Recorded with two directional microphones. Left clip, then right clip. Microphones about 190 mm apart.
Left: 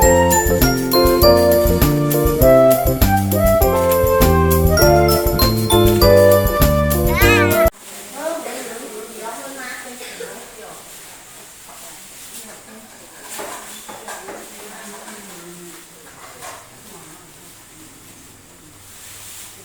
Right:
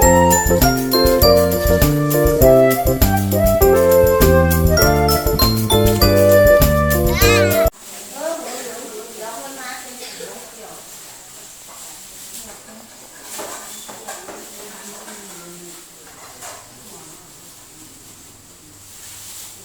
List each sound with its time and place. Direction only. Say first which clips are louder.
0.0 s jingle: even; centre (ahead or behind)
4.0 s music: right 2 dB; centre (ahead or behind)
7.1 s music: left 1 dB; 15° right (ahead or behind)